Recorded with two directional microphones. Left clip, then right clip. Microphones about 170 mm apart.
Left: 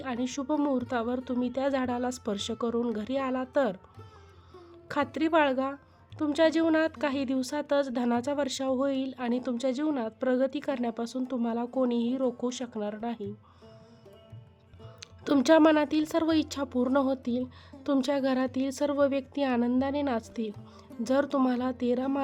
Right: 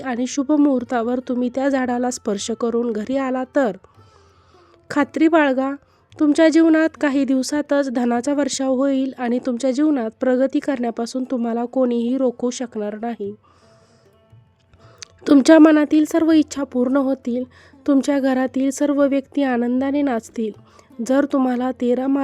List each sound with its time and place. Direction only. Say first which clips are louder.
0.0 s a woman's voice: right 10 dB; 40° right (ahead or behind)
4.9 s a woman's voice: right 11 dB; 40° right (ahead or behind)
15.0 s a woman's voice: right 11 dB; 40° right (ahead or behind)